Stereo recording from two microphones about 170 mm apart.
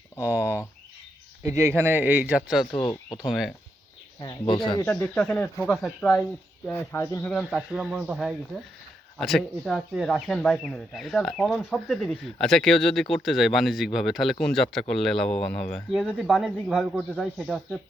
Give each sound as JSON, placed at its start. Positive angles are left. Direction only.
{"t": 1.4, "sound": "speech", "side_deg": -20}
{"t": 4.2, "sound": "speech", "side_deg": 25}
{"t": 7.5, "sound": "speech", "side_deg": -5}